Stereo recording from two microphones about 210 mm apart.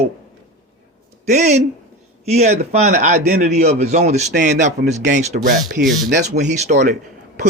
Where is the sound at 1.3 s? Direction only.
35° right (ahead or behind).